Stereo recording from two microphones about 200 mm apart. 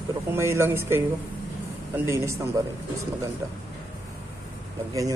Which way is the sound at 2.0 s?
15° right (ahead or behind).